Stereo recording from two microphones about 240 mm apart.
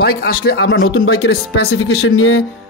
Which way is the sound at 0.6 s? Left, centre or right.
Left.